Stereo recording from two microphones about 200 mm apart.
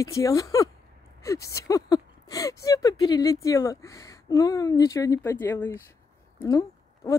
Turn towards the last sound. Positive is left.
turn(degrees=20)  # may be behind; listen again after turning